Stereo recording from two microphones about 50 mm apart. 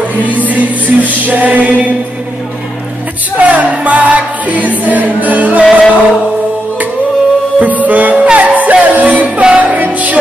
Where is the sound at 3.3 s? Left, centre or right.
Right.